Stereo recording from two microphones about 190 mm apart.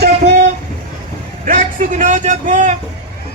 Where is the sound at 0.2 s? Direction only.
35° right (ahead or behind).